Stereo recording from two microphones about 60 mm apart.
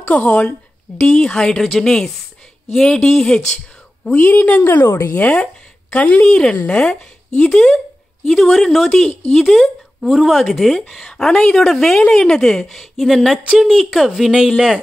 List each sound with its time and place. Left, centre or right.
0.0 s a woman's voice: left
4.0 s a woman's voice: left
5.1 s speech: left; by 14.4 s centre